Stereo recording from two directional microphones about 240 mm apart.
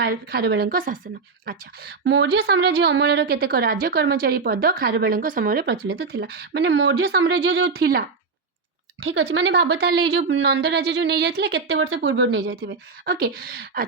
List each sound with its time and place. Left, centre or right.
0.0 s speech: right
9.0 s speech: right